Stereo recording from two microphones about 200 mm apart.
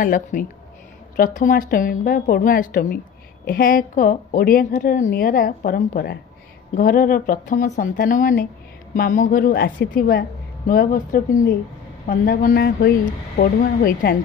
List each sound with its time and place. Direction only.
0.0 s a woman's voice: 45° left (ahead or behind)